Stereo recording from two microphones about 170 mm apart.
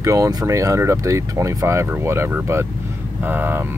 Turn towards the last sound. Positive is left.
turn(degrees=-10)  # may be behind; listen again after turning